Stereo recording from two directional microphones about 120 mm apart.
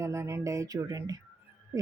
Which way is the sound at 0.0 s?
25° right (ahead or behind).